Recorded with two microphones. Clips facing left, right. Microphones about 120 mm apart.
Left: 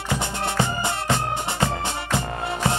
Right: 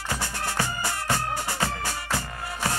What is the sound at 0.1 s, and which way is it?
Music, 20° left (ahead or behind).